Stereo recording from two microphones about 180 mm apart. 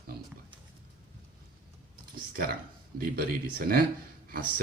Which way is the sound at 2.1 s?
55° right (ahead or behind).